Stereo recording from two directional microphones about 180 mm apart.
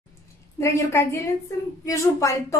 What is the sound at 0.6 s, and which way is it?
A woman's voice, 15° left (ahead or behind).